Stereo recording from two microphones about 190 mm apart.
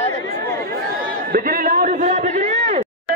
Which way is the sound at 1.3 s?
45° right (ahead or behind).